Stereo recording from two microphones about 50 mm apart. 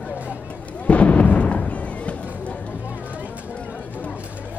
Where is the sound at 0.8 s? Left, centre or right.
Left.